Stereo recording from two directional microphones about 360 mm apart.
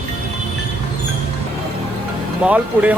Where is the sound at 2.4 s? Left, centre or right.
Centre.